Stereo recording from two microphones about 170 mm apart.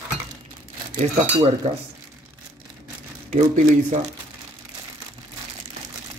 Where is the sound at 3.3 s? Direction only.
45° right (ahead or behind).